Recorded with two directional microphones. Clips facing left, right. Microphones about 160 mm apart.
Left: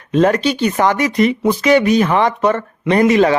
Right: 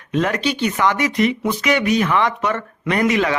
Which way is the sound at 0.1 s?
35° left (ahead or behind).